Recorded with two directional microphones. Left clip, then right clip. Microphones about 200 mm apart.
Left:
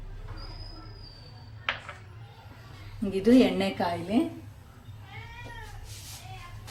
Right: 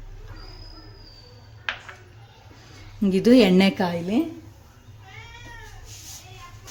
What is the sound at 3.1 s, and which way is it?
Speech, 55° right (ahead or behind).